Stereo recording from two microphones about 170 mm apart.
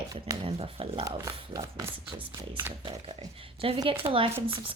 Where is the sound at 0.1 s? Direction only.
30° right (ahead or behind).